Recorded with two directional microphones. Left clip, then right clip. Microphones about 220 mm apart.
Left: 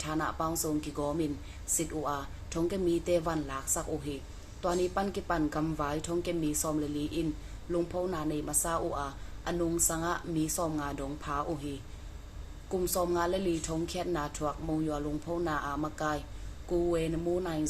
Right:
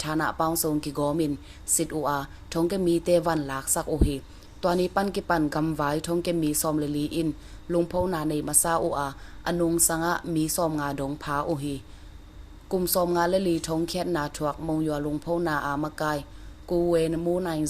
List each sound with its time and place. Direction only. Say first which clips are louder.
0.0 s speech: right 7 dB; 45° right (ahead or behind)